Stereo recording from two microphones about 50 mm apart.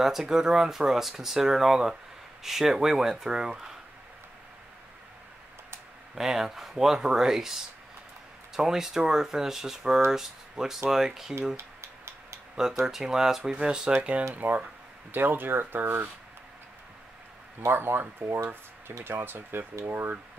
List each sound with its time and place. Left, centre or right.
0.0 s speech: centre
6.1 s speech: centre
8.5 s speech: centre
11.5 s a sound: right
12.8 s speech: centre
13.4 s speech: centre
14.3 s speech: right
17.6 s speech: right